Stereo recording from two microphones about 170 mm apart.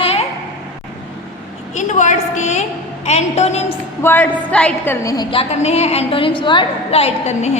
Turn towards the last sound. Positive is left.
turn(degrees=40)  # may be behind; listen again after turning